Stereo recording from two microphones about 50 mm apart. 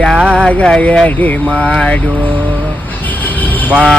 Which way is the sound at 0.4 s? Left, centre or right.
Left.